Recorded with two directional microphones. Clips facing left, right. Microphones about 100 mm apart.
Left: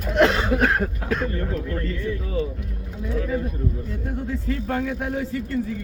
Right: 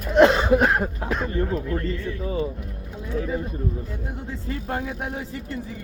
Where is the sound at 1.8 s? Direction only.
30° right (ahead or behind).